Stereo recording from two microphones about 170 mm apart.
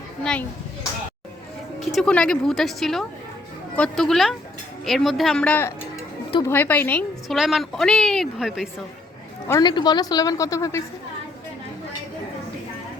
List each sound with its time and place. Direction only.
1.8 s a woman's voice: centre (ahead or behind)
7.3 s a woman's voice: centre (ahead or behind)
9.5 s a woman's voice: 25° left (ahead or behind)